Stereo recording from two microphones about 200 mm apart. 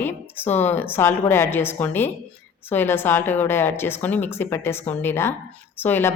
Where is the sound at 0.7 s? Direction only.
10° left (ahead or behind).